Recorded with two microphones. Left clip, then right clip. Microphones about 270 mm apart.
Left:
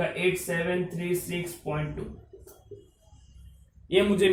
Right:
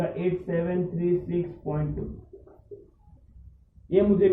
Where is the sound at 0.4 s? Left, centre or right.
Centre.